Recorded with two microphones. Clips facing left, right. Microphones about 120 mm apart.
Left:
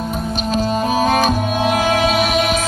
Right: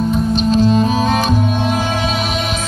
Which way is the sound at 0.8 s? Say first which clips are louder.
Even; 45° left (ahead or behind).